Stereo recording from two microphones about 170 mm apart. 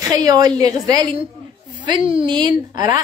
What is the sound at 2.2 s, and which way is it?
Speech, 25° right (ahead or behind).